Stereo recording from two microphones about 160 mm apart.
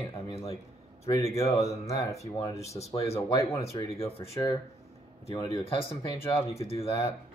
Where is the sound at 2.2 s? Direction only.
40° left (ahead or behind).